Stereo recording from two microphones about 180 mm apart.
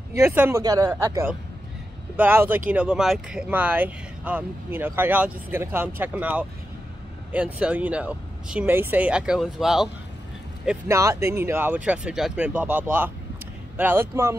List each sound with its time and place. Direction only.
0.1 s speech: 15° right (ahead or behind)
10.9 s speech: 15° right (ahead or behind)